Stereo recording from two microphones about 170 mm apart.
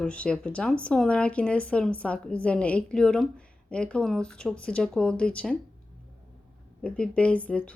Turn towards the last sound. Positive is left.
turn(degrees=10)  # may be behind; listen again after turning